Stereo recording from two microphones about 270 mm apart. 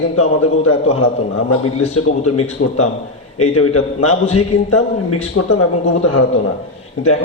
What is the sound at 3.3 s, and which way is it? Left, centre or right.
A man's voice, left.